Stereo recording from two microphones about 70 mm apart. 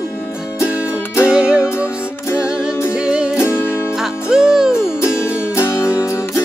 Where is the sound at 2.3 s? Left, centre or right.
Centre.